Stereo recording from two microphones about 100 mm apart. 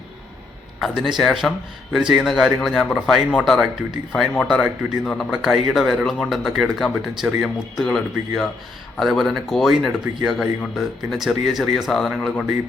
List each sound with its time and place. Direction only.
0.8 s a man's voice: 5° right (ahead or behind)